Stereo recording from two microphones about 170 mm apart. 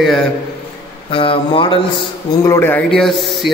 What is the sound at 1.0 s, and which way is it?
A man's voice, 30° left (ahead or behind).